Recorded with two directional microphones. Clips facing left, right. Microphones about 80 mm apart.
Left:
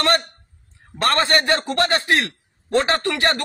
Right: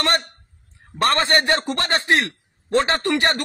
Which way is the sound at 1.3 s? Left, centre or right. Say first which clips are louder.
Even; centre.